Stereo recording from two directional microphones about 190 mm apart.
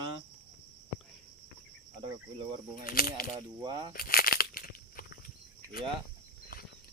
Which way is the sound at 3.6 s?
25° right (ahead or behind).